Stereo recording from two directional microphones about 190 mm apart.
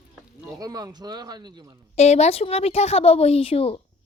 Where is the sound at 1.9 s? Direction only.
35° left (ahead or behind).